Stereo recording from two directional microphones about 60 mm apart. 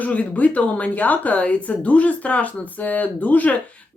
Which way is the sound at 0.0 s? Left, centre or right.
Left.